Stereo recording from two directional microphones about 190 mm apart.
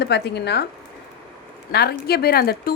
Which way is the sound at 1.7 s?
55° left (ahead or behind).